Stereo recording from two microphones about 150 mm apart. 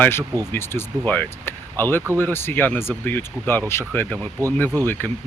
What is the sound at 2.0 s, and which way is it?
Speech, 20° right (ahead or behind).